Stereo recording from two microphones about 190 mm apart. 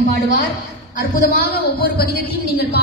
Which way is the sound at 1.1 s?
55° left (ahead or behind).